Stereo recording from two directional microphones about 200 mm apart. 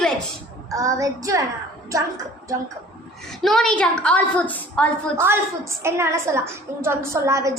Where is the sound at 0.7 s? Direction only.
15° right (ahead or behind).